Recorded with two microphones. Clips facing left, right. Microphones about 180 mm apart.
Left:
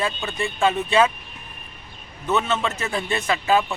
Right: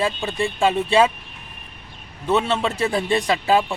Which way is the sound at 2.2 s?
30° right (ahead or behind).